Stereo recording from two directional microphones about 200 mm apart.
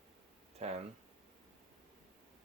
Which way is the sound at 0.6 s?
30° right (ahead or behind).